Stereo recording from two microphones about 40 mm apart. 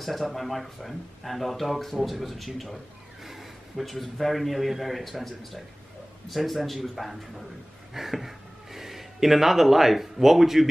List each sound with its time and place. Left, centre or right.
0.0 s speech: centre